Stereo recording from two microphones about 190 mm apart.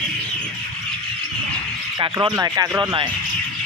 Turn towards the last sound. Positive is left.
turn(degrees=-25)  # may be behind; listen again after turning